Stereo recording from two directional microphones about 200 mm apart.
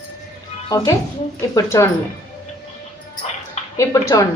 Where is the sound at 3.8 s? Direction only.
15° left (ahead or behind).